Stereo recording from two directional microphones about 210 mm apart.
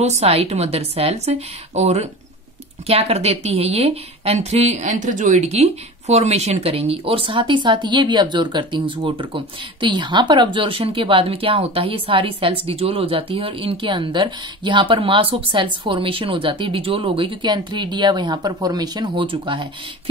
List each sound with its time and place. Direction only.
0.0 s a woman's voice: 30° right (ahead or behind)